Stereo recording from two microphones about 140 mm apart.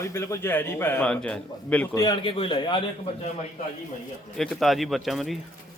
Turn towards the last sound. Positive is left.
turn(degrees=0)  # may be behind; listen again after turning